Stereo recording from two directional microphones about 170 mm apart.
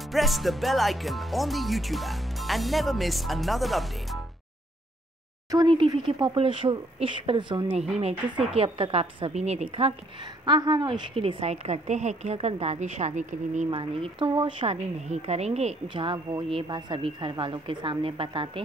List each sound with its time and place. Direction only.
0.1 s speech: centre (ahead or behind)
5.5 s a woman's voice: 25° right (ahead or behind)
10.4 s a woman's voice: 25° right (ahead or behind); by 13.7 s 45° right (ahead or behind)
13.7 s a woman's voice: 30° right (ahead or behind)